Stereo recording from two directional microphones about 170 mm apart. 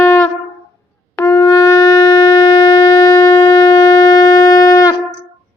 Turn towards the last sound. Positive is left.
turn(degrees=20)  # may be behind; listen again after turning